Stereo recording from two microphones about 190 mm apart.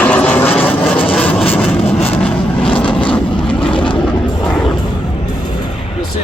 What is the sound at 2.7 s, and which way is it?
Vehicle, 25° left (ahead or behind).